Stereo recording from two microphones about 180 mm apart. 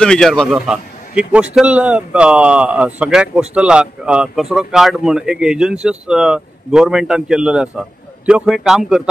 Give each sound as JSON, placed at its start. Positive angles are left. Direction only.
{"t": 0.0, "sound": "a man's voice", "side_deg": 5}